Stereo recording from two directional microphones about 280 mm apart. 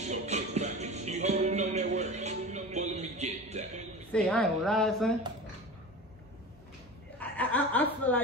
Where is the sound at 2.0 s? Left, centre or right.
Right.